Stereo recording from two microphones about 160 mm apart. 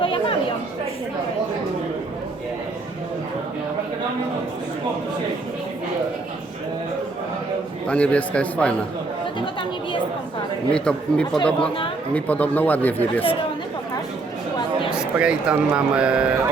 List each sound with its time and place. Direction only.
0.0 s chatter: 35° left (ahead or behind)
7.9 s speech: 10° left (ahead or behind)
10.7 s speech: 5° left (ahead or behind)
14.9 s speech: 5° right (ahead or behind)